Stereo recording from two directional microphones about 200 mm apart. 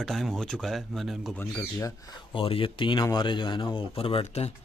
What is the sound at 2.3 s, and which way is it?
Speech, 25° left (ahead or behind).